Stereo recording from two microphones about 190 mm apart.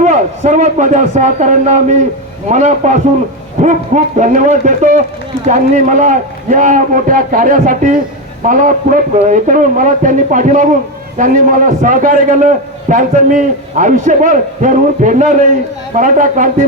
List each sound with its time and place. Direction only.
0.0 s a man's voice: 40° right (ahead or behind)